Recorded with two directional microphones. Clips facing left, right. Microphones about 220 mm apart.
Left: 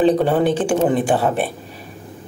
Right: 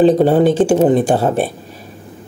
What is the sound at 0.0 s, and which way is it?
Speech, 40° right (ahead or behind).